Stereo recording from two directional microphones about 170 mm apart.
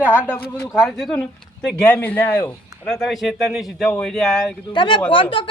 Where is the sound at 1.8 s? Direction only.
10° left (ahead or behind).